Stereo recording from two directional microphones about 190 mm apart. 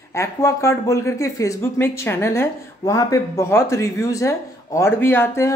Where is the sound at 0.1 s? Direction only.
15° left (ahead or behind).